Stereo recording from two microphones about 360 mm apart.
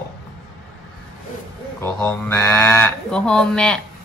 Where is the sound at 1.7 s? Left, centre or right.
Centre.